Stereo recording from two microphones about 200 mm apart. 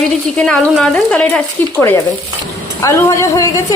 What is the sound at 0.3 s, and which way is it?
Speech, 5° left (ahead or behind).